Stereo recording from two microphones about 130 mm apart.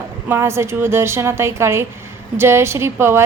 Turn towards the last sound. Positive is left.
turn(degrees=-20)  # may be behind; listen again after turning